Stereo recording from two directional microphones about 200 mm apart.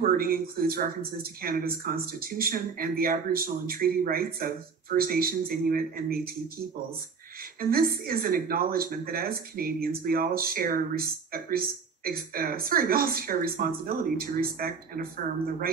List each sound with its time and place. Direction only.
0.0 s speech: 50° right (ahead or behind)
7.7 s speech: 45° right (ahead or behind)